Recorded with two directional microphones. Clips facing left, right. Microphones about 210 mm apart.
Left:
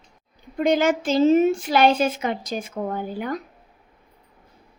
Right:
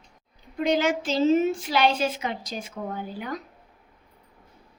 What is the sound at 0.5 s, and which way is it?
A woman's voice, 50° left (ahead or behind).